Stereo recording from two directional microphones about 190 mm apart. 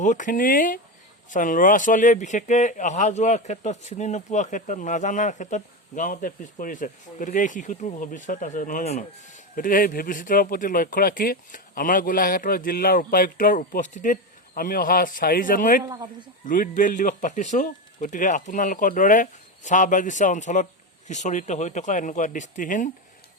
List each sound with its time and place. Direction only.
0.0 s speech: 40° left (ahead or behind)
15.8 s speech: 20° right (ahead or behind)
16.5 s speech: 45° left (ahead or behind)